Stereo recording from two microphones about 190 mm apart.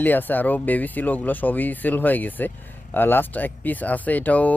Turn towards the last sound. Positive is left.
turn(degrees=10)  # may be behind; listen again after turning